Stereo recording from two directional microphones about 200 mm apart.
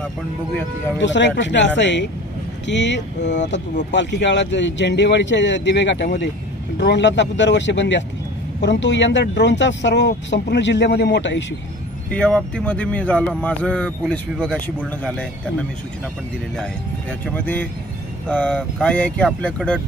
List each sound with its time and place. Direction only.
0.9 s speech: 65° left (ahead or behind)
12.1 s speech: 5° left (ahead or behind)
17.3 s speech: 10° left (ahead or behind)